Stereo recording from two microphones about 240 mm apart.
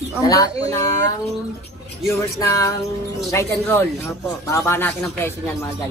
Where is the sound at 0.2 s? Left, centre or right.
Centre.